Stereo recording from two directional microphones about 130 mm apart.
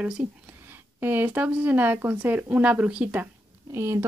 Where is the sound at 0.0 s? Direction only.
10° right (ahead or behind).